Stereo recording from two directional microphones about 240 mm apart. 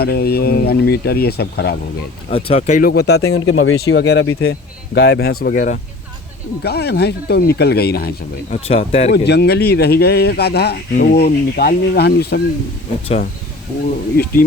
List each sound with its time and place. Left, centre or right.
0.0 s speech: left
2.3 s speech: left
3.1 s speech: left
4.9 s speech: left
8.6 s speech: left
9.1 s speech: left
14.2 s speech: left